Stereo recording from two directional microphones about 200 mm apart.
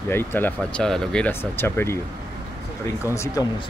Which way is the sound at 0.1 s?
10° left (ahead or behind).